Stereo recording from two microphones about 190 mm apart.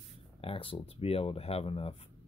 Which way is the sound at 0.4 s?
30° left (ahead or behind).